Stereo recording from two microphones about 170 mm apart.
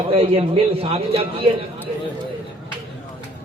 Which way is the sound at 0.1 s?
35° right (ahead or behind).